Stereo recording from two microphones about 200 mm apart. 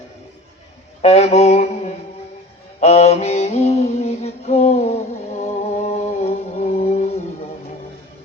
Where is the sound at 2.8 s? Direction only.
30° left (ahead or behind).